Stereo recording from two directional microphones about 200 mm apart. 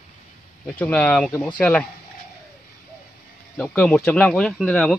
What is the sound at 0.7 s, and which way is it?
Speech, 5° left (ahead or behind).